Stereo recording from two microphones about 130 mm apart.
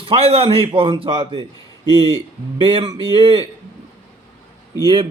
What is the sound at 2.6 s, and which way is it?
Speech, 40° right (ahead or behind).